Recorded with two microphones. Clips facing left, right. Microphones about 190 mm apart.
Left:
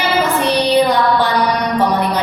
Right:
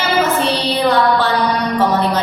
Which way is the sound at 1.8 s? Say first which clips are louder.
Right 2 dB; 15° left (ahead or behind).